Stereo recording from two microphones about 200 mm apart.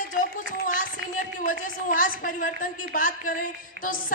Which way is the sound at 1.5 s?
40° left (ahead or behind).